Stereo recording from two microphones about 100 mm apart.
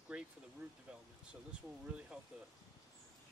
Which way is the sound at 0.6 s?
20° right (ahead or behind).